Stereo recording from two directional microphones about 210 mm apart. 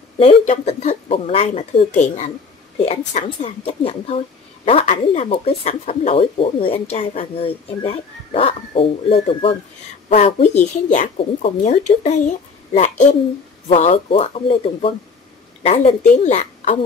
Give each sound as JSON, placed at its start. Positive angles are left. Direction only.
{"t": 0.2, "sound": "speech", "side_deg": 30}